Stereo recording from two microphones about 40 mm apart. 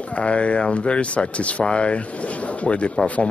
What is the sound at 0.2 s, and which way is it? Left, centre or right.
A man's voice, left.